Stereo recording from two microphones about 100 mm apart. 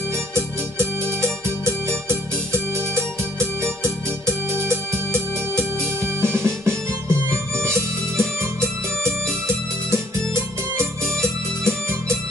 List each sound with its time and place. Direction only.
0.3 s music: 25° right (ahead or behind)
10.8 s organ: 25° right (ahead or behind)